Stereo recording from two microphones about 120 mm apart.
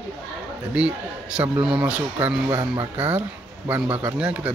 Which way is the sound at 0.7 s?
10° right (ahead or behind).